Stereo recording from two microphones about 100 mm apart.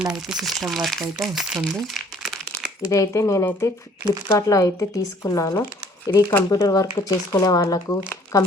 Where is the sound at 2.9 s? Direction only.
30° left (ahead or behind).